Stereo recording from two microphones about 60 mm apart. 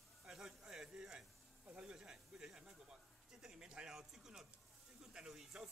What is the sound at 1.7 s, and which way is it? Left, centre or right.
Speech, centre.